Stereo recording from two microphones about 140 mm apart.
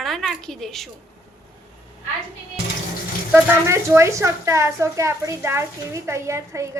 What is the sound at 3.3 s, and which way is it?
A woman's voice, 15° right (ahead or behind).